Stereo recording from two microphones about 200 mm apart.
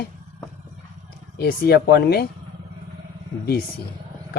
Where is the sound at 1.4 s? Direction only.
50° left (ahead or behind).